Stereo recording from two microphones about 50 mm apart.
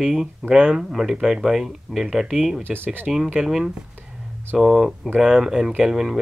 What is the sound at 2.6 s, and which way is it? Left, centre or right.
Speech, right.